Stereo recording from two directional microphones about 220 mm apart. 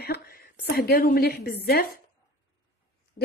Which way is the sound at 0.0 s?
45° left (ahead or behind).